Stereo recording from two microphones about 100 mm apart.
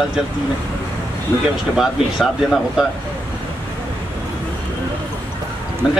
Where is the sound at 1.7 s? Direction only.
5° right (ahead or behind).